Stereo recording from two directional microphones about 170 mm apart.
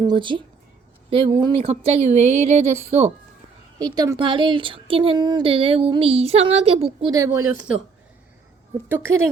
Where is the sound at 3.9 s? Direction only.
20° right (ahead or behind).